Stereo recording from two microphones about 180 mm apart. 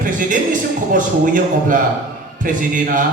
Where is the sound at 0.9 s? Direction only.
50° right (ahead or behind).